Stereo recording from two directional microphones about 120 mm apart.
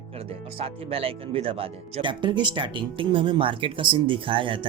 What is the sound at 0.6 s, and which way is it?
Speech, 55° right (ahead or behind).